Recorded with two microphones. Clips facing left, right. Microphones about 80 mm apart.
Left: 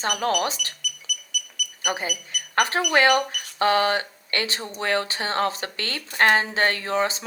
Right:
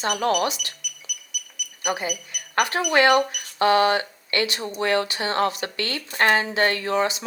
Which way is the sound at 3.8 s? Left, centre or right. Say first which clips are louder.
Right 3 dB; left.